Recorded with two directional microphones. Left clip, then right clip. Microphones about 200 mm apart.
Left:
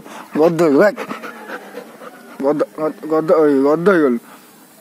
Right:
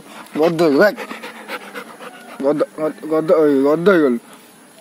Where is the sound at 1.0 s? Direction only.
55° left (ahead or behind).